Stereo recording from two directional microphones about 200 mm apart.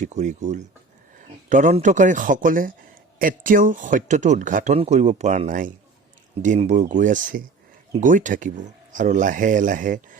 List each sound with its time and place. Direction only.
0.0 s speech: 35° right (ahead or behind)